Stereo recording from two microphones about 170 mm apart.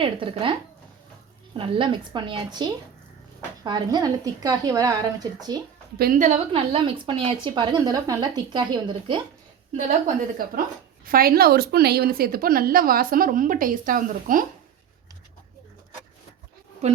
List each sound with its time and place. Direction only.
0.0 s speech: 30° right (ahead or behind)
1.5 s a woman's voice: 30° right (ahead or behind)
6.0 s a woman's voice: 55° right (ahead or behind)
6.5 s a woman's voice: 35° right (ahead or behind)
11.0 s a woman's voice: 60° right (ahead or behind)
16.8 s a woman's voice: 40° right (ahead or behind)